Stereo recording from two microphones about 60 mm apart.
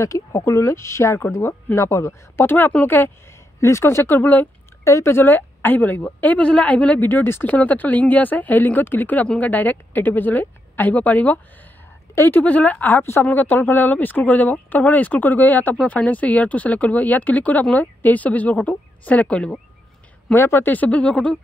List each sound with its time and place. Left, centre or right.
0.0 s speech: left
2.4 s a woman's voice: left
3.6 s speech: left
4.2 s a woman's voice: left
4.8 s speech: left
5.1 s speech: left
7.1 s a woman's voice: left
7.4 s a woman's voice: left
20.3 s speech: left; by 21.4 s centre